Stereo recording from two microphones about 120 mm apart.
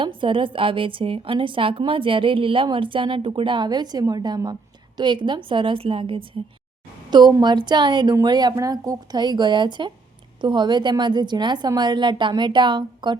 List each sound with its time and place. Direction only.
0.0 s a woman's voice: 45° right (ahead or behind)
7.1 s a woman's voice: 35° right (ahead or behind)